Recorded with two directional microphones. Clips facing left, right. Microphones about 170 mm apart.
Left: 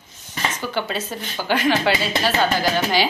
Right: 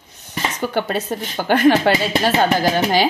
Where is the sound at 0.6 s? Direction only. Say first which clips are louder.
Right 8 dB; 50° right (ahead or behind).